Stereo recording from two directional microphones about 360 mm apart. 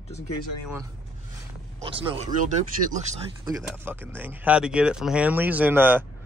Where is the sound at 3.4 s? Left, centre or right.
Centre.